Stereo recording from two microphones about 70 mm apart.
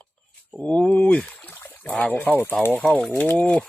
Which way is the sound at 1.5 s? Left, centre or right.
Left.